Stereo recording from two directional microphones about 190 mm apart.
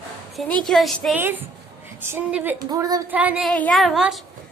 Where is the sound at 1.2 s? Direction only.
10° right (ahead or behind).